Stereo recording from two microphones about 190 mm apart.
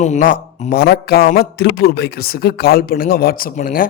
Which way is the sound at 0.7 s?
55° left (ahead or behind).